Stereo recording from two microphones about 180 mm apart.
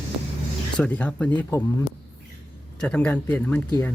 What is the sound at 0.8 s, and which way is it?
Speech, 5° left (ahead or behind).